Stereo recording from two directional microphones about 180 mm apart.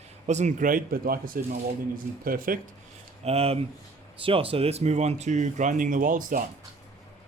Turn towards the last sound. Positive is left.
turn(degrees=-45)  # may be behind; listen again after turning